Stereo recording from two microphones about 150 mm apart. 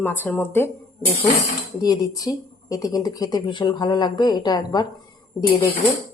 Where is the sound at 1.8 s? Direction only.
25° left (ahead or behind).